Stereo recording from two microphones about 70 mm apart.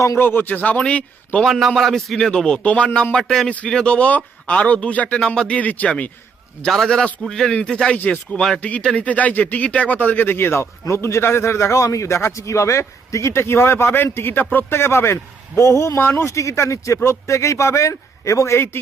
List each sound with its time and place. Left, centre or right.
0.2 s a man's voice: left
1.5 s a man's voice: centre
3.2 s a man's voice: centre; by 6.1 s left
6.7 s a man's voice: centre; by 8.4 s left
8.4 s a man's voice: centre
8.6 s a man's voice: centre; by 18.8 s left